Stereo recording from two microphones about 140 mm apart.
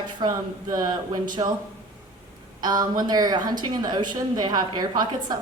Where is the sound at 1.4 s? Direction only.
35° right (ahead or behind).